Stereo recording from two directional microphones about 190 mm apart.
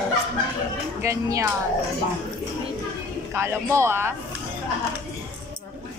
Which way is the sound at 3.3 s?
15° right (ahead or behind).